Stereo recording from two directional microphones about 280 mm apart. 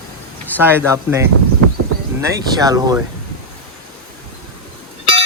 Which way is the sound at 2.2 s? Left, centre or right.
Centre.